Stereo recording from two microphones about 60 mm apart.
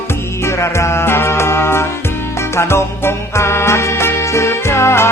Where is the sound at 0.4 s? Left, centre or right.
Left.